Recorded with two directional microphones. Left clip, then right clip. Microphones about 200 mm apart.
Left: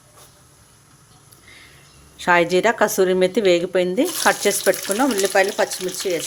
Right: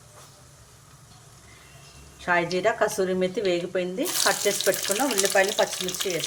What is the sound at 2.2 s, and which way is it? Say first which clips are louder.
A woman's voice: left 7 dB; 55° left (ahead or behind).